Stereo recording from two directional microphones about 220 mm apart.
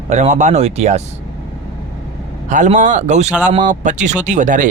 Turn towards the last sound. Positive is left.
turn(degrees=-35)  # may be behind; listen again after turning